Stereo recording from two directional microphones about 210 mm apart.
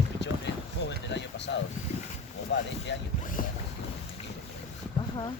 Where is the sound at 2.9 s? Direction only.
55° left (ahead or behind).